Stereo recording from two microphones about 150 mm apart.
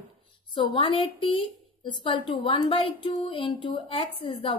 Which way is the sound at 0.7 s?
35° left (ahead or behind).